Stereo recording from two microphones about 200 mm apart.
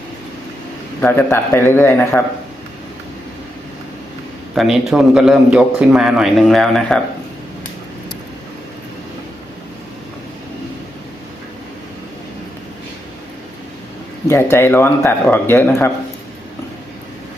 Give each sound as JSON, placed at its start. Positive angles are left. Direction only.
{"t": 1.0, "sound": "speech", "side_deg": 10}
{"t": 4.5, "sound": "a man's voice", "side_deg": 0}
{"t": 14.3, "sound": "speech", "side_deg": 10}